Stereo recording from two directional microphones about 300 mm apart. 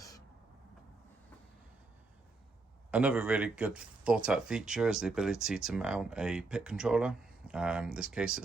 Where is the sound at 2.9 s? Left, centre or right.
Centre.